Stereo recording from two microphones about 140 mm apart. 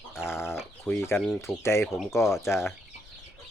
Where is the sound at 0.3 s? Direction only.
15° left (ahead or behind).